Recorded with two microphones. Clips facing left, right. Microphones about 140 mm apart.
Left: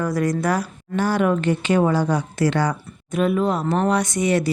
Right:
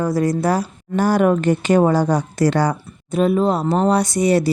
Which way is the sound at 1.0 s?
45° right (ahead or behind).